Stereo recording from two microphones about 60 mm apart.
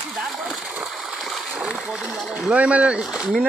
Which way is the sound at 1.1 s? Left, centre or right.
Centre.